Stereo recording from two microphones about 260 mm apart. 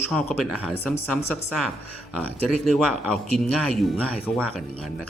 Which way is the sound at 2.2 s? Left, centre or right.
Centre.